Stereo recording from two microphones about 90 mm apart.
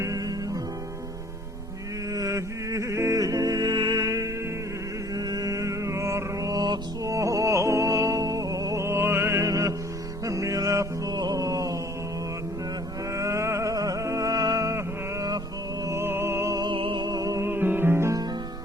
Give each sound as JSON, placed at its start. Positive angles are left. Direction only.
{"t": 0.0, "sound": "music", "side_deg": -40}
{"t": 2.1, "sound": "music", "side_deg": -40}
{"t": 4.0, "sound": "music", "side_deg": -40}
{"t": 13.1, "sound": "music", "side_deg": -35}
{"t": 16.7, "sound": "music", "side_deg": -70}
{"t": 17.1, "sound": "music", "side_deg": -40}
{"t": 17.5, "sound": "music", "side_deg": -25}